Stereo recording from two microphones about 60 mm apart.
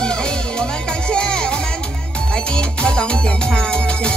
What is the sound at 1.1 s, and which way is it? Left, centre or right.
Music, centre.